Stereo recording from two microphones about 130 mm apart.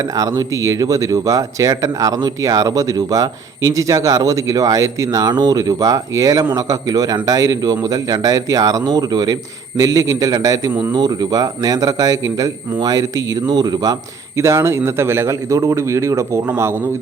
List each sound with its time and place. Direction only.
0.0 s a man's voice: 25° right (ahead or behind)